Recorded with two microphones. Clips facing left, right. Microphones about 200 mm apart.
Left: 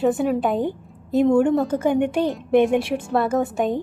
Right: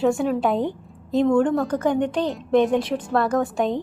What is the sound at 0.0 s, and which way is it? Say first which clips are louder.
A woman's voice: left 1 dB; centre (ahead or behind).